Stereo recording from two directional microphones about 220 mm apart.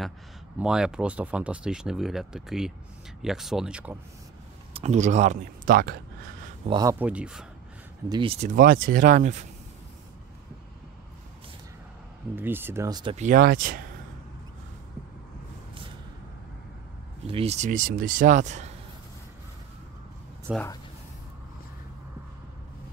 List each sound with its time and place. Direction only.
0.6 s speech: 5° right (ahead or behind)
4.7 s speech: 30° right (ahead or behind)
6.7 s speech: 15° right (ahead or behind)
8.1 s speech: 25° right (ahead or behind)
12.4 s speech: 10° right (ahead or behind)
13.1 s speech: 35° right (ahead or behind)
17.3 s speech: 25° right (ahead or behind)
20.5 s speech: 5° right (ahead or behind)